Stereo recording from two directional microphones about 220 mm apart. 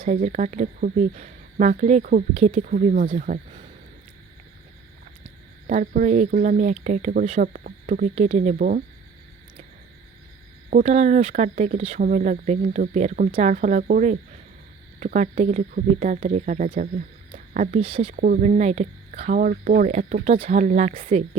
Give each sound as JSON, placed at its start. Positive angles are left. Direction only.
{"t": 0.0, "sound": "speech", "side_deg": -35}
{"t": 5.6, "sound": "speech", "side_deg": -35}
{"t": 10.7, "sound": "speech", "side_deg": -35}
{"t": 18.2, "sound": "speech", "side_deg": -40}